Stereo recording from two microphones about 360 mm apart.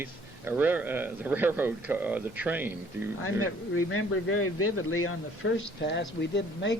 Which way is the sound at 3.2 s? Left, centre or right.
Left.